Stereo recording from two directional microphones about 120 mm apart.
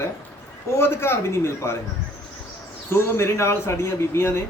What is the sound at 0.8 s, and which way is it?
A man's voice, 20° left (ahead or behind).